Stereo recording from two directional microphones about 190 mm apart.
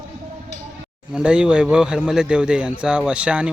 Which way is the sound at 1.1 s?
5° right (ahead or behind).